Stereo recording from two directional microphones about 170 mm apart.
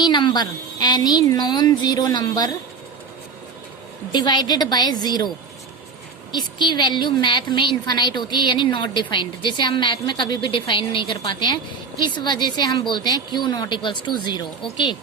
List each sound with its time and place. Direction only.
0.0 s a woman's voice: 25° left (ahead or behind)
4.1 s a woman's voice: 25° left (ahead or behind)
6.3 s a woman's voice: 25° left (ahead or behind)